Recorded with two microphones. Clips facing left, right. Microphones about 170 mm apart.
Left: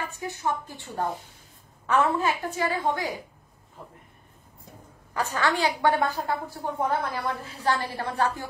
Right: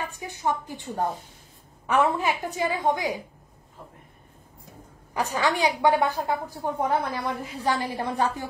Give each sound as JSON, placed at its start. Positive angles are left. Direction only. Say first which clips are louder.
{"t": 0.1, "sound": "a woman's voice", "louder": "right 1 dB", "side_deg": -15}
{"t": 5.1, "sound": "a woman's voice", "louder": "right 1 dB", "side_deg": -15}